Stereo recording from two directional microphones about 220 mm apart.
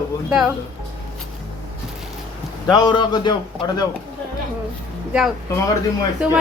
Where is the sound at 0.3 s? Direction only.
5° right (ahead or behind).